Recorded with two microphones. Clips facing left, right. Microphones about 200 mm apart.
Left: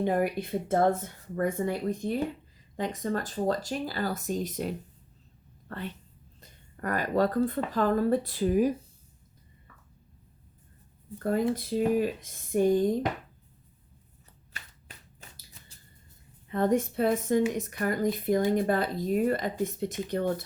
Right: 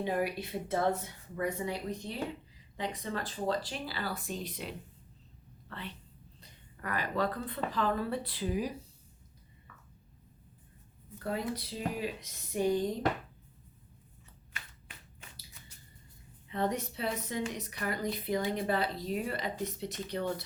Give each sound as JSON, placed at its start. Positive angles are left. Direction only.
{"t": 0.0, "sound": "speech", "side_deg": 50}
{"t": 11.2, "sound": "speech", "side_deg": 50}
{"t": 16.5, "sound": "speech", "side_deg": 50}